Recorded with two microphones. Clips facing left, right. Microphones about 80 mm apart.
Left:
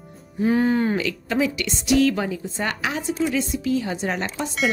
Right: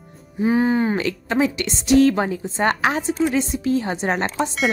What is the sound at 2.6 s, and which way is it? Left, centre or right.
A woman's voice, right.